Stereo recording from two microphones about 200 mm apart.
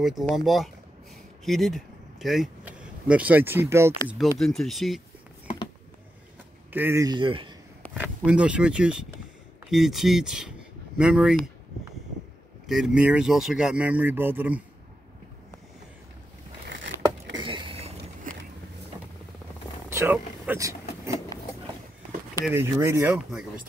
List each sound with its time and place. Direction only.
0.0 s speech: centre (ahead or behind)
4.2 s speech: centre (ahead or behind)
6.7 s speech: 10° right (ahead or behind)
8.3 s speech: 5° right (ahead or behind)
12.6 s speech: centre (ahead or behind)
16.6 s a sound: 65° right (ahead or behind)
17.4 s a sound: 25° right (ahead or behind)
19.9 s vehicle: 10° right (ahead or behind)
22.5 s speech: 15° right (ahead or behind)